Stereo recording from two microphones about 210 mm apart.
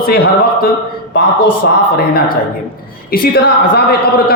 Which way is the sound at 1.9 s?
45° left (ahead or behind).